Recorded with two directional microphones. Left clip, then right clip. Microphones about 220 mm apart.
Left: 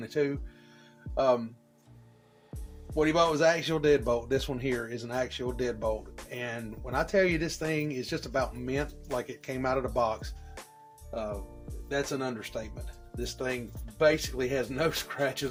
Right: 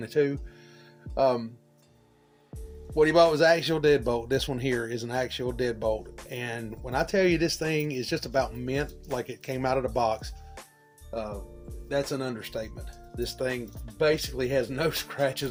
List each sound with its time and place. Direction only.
0.0 s speech: 50° right (ahead or behind)
2.9 s speech: 50° right (ahead or behind)
11.9 s speech: 50° right (ahead or behind)